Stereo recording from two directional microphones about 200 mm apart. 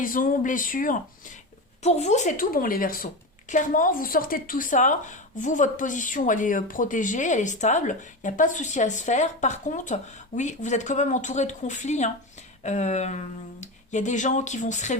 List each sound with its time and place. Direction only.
0.0 s speech: 45° left (ahead or behind)